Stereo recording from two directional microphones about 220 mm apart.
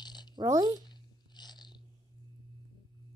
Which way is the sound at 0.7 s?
20° left (ahead or behind).